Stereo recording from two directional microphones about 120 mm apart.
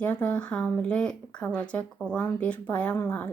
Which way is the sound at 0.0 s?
15° left (ahead or behind).